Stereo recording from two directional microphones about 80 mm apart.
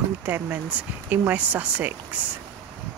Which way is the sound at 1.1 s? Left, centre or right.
Right.